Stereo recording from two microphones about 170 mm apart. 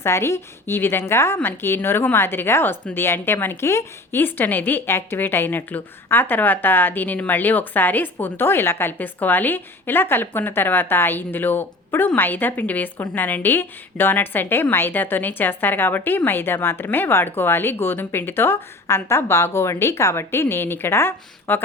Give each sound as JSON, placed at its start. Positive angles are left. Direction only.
{"t": 0.0, "sound": "a woman's voice", "side_deg": 15}